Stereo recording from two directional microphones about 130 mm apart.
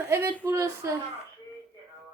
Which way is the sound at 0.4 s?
20° right (ahead or behind).